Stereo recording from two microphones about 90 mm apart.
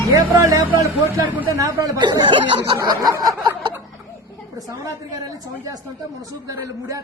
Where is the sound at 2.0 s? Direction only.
60° right (ahead or behind).